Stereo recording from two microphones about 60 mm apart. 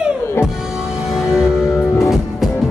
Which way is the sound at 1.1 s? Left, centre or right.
Centre.